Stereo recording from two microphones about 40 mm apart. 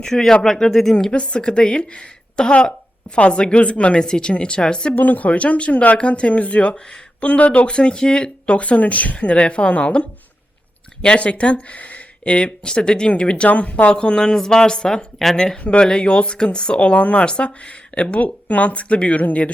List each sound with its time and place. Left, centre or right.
0.1 s speech: centre
1.1 s speech: left
4.9 s speech: left
7.7 s speech: left
13.9 s speech: left